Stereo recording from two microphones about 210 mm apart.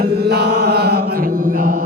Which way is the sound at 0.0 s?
50° right (ahead or behind).